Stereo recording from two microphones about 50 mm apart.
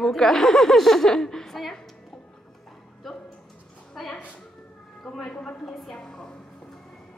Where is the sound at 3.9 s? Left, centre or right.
Centre.